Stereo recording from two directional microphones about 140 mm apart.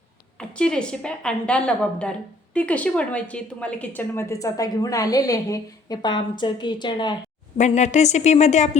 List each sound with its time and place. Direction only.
0.3 s speech: 5° left (ahead or behind); by 7.2 s 35° left (ahead or behind)
7.6 s a woman's voice: 55° left (ahead or behind)